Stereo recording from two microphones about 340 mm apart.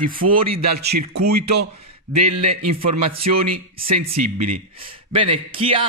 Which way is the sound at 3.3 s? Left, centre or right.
Right.